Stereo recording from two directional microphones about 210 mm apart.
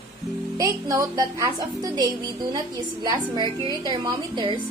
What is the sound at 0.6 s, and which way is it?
A woman's voice, 15° right (ahead or behind).